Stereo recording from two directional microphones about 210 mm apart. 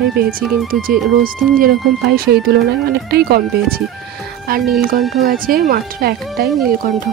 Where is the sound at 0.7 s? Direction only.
45° right (ahead or behind).